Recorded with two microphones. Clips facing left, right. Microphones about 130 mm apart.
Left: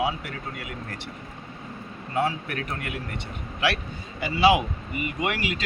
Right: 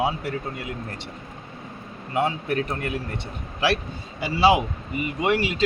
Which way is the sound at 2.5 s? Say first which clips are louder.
Right 6 dB; 30° right (ahead or behind).